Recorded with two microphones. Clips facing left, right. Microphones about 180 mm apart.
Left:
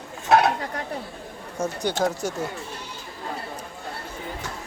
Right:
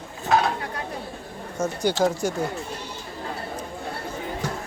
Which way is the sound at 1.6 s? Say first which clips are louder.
Right 1 dB; 10° left (ahead or behind).